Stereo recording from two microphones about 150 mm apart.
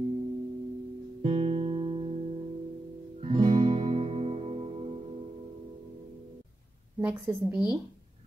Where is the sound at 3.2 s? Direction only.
35° right (ahead or behind).